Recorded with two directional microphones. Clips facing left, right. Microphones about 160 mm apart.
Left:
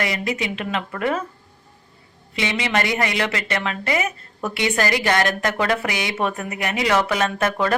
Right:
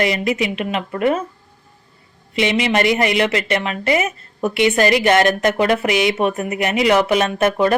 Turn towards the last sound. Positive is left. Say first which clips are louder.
# right 5 dB
turn(degrees=-20)  # may be behind; listen again after turning